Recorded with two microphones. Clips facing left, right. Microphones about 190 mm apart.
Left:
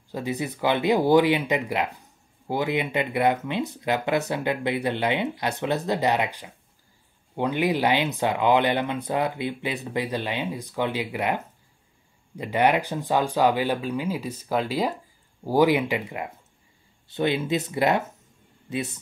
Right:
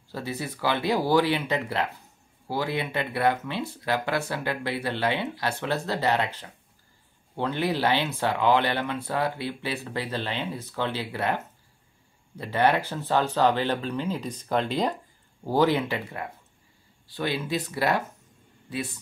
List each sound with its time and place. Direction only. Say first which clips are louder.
0.1 s speech: left 4 dB; 15° left (ahead or behind)